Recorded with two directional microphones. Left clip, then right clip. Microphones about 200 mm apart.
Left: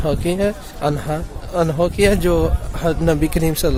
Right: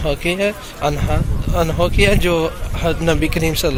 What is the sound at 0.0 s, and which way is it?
Speech, 30° left (ahead or behind).